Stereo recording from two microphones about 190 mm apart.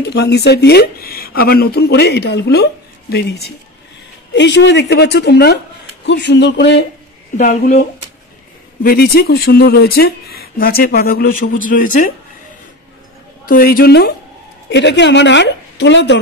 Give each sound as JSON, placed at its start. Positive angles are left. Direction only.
{"t": 0.0, "sound": "speech", "side_deg": 60}
{"t": 7.3, "sound": "a woman's voice", "side_deg": 40}
{"t": 8.8, "sound": "speech", "side_deg": 50}
{"t": 13.5, "sound": "speech", "side_deg": 50}
{"t": 14.7, "sound": "a woman's voice", "side_deg": 65}